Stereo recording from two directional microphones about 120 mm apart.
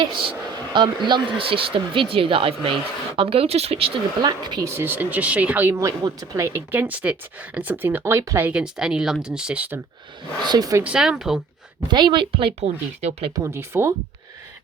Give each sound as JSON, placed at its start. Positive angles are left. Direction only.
{"t": 0.0, "sound": "speech", "side_deg": -45}
{"t": 4.2, "sound": "speech", "side_deg": -35}
{"t": 4.6, "sound": "speech", "side_deg": -20}
{"t": 8.4, "sound": "speech", "side_deg": -10}
{"t": 10.4, "sound": "speech", "side_deg": -35}
{"t": 10.8, "sound": "speech", "side_deg": -5}
{"t": 11.9, "sound": "speech", "side_deg": -40}
{"t": 12.5, "sound": "speech", "side_deg": -65}
{"t": 13.3, "sound": "speech", "side_deg": -20}